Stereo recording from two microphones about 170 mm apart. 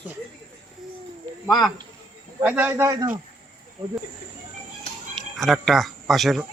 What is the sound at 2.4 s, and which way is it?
Speech, 10° right (ahead or behind).